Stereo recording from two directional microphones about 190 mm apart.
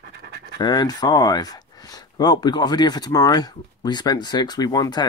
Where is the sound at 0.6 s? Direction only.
20° left (ahead or behind).